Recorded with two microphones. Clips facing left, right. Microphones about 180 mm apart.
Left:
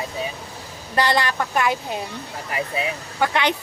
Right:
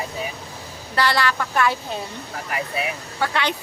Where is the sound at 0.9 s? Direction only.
20° left (ahead or behind).